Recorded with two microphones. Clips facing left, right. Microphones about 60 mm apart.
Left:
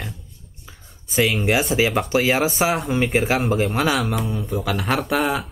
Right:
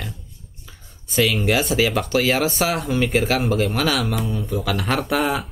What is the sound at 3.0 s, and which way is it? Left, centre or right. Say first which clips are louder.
Speech: right 1 dB; centre.